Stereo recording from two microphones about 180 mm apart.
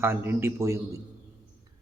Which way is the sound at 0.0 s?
15° right (ahead or behind).